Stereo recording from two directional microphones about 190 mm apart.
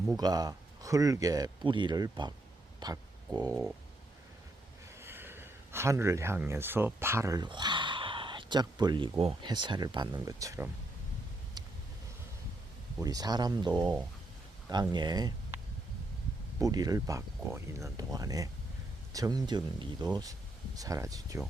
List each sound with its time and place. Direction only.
0.2 s speech: 20° right (ahead or behind)
4.9 s speech: 10° right (ahead or behind)
11.6 s vehicle: 20° right (ahead or behind)
13.0 s speech: 20° right (ahead or behind)
16.6 s speech: 20° right (ahead or behind)